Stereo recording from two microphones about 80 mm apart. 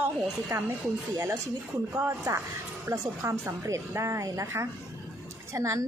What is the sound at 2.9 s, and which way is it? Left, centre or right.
A woman's voice, right.